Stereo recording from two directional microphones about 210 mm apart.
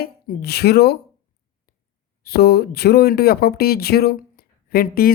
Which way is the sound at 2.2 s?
50° left (ahead or behind).